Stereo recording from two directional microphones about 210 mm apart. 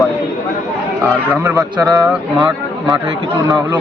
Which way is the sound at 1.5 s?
15° right (ahead or behind).